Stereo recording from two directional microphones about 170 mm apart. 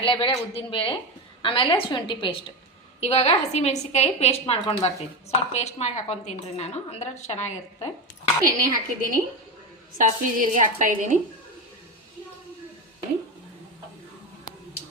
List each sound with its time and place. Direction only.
0.0 s a woman's voice: 30° left (ahead or behind)
8.5 s a woman's voice: 55° right (ahead or behind)